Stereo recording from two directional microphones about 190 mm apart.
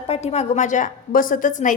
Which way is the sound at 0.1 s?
35° left (ahead or behind).